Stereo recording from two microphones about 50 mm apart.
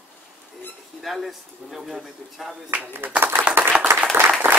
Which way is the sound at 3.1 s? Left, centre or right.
Right.